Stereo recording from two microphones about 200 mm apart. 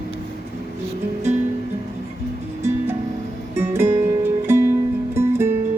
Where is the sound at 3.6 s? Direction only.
10° right (ahead or behind).